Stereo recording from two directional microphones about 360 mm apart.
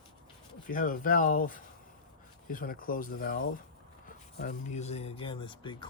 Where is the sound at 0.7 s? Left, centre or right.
Left.